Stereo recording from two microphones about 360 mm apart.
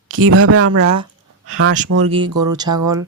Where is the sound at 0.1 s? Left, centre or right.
Right.